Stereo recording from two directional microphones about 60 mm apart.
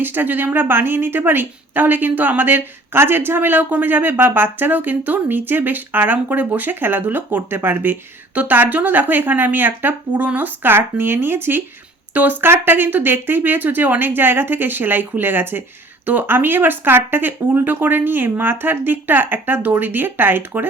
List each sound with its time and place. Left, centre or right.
0.0 s a woman's voice: right